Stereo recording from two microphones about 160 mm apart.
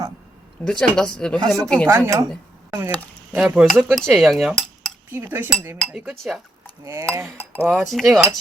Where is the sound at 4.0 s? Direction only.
Centre (ahead or behind).